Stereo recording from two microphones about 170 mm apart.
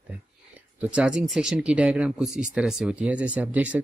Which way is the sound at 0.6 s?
10° right (ahead or behind).